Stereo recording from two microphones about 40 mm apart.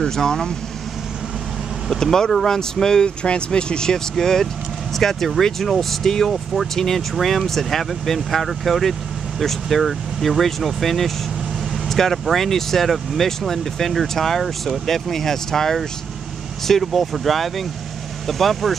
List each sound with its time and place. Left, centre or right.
0.1 s speech: centre
1.9 s speech: centre
3.2 s speech: left; by 18.8 s centre